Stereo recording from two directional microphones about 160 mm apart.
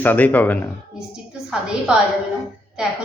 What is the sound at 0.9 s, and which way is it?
A woman's voice, 5° right (ahead or behind).